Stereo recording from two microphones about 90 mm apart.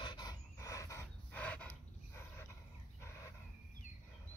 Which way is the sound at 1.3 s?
15° left (ahead or behind).